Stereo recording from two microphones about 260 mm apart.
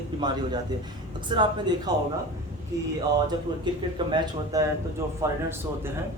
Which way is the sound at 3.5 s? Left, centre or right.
Centre.